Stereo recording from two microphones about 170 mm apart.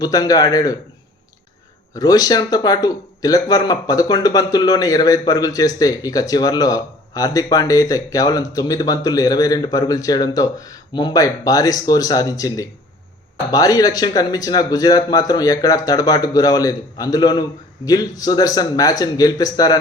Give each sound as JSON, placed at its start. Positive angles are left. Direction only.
{"t": 0.0, "sound": "speech", "side_deg": 25}
{"t": 2.0, "sound": "speech", "side_deg": 20}